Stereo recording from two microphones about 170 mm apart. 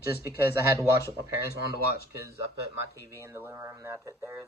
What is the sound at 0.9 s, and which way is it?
Speech, 70° left (ahead or behind).